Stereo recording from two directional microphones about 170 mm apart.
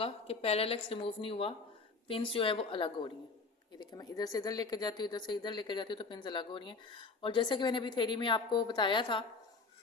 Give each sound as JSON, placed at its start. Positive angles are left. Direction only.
{"t": 0.0, "sound": "a woman's voice", "side_deg": 35}